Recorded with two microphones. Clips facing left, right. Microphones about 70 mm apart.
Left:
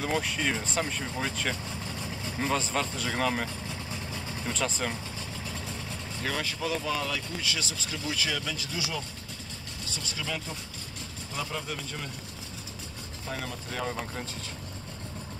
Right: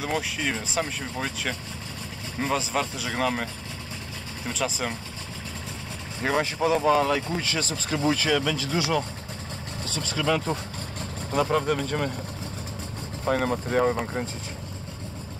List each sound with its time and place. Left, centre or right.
0.0 s speech: centre
4.5 s speech: centre
6.2 s speech: right
10.2 s speech: right
11.3 s speech: right
13.2 s speech: right